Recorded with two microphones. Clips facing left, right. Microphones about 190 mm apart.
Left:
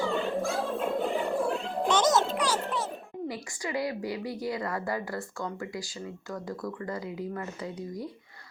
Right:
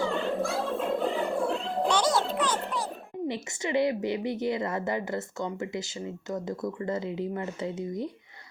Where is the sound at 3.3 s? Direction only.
25° right (ahead or behind).